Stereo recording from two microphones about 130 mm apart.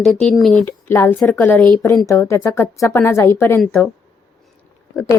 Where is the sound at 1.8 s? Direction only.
25° left (ahead or behind).